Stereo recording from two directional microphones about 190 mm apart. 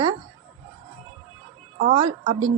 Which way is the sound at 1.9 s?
25° right (ahead or behind).